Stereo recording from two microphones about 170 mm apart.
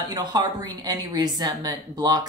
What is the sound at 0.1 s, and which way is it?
Speech, 25° right (ahead or behind).